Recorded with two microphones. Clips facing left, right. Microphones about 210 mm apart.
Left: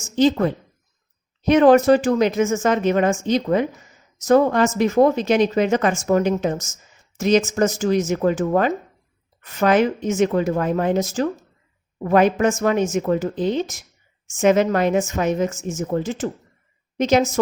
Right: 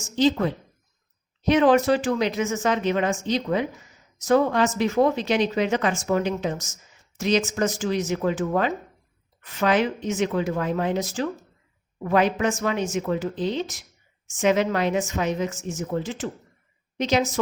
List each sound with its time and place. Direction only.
0.0 s a woman's voice: 50° left (ahead or behind)